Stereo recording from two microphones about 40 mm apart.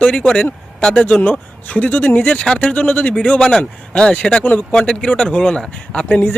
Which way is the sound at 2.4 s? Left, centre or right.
Left.